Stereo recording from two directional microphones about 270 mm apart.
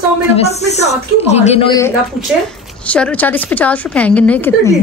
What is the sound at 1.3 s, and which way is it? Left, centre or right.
A woman's voice, left.